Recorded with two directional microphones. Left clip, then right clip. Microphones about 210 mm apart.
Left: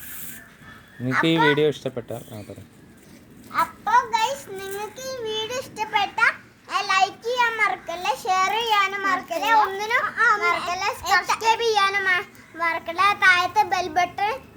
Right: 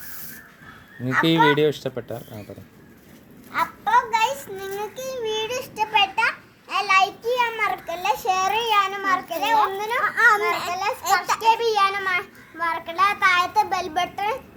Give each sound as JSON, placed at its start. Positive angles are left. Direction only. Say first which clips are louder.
{"t": 1.0, "sound": "speech", "louder": "right 1 dB", "side_deg": 0}
{"t": 3.5, "sound": "a sound", "louder": "even", "side_deg": -15}
{"t": 10.2, "sound": "a child's voice", "louder": "right 4 dB", "side_deg": -30}
{"t": 10.7, "sound": "a child's voice", "louder": "even", "side_deg": 10}